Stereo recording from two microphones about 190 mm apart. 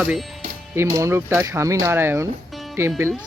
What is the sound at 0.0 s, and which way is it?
Speech, 5° right (ahead or behind).